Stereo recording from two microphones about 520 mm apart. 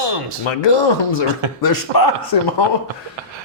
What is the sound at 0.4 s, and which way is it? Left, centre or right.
Speech, left.